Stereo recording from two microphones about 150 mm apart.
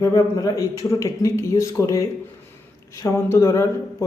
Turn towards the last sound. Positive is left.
turn(degrees=20)  # may be behind; listen again after turning